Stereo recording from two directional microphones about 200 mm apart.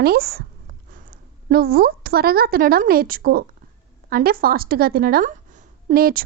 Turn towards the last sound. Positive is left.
turn(degrees=-45)  # may be behind; listen again after turning